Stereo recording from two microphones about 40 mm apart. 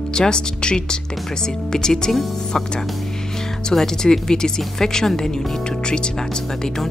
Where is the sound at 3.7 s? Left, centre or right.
Centre.